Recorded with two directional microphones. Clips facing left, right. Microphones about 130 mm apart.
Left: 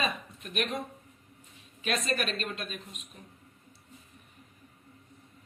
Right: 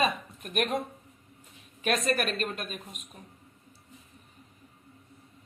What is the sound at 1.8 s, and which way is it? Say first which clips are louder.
Speech: right 3 dB; 45° right (ahead or behind).